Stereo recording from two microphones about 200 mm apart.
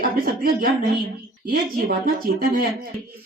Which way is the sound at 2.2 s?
45° right (ahead or behind).